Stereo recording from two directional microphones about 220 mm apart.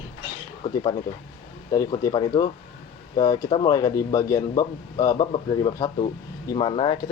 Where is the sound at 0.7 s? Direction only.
20° left (ahead or behind).